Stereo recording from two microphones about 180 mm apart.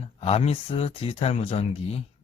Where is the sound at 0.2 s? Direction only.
35° left (ahead or behind).